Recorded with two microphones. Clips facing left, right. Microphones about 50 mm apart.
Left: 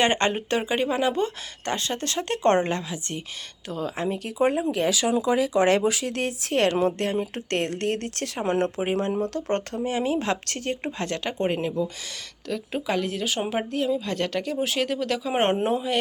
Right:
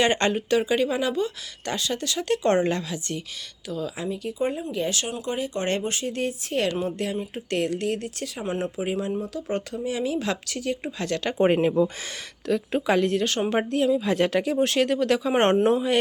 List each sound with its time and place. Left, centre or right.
0.0 s speech: left
2.6 s a woman's voice: left
3.7 s speech: left
5.6 s speech: left
8.9 s speech: left
9.9 s speech: left
10.4 s speech: left
11.4 s speech: right
12.5 s speech: centre
14.6 s speech: centre